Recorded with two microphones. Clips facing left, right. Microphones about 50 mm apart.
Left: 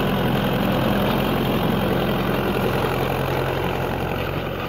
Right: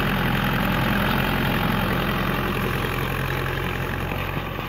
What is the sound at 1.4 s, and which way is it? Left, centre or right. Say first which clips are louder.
Vehicle: left 2 dB; right.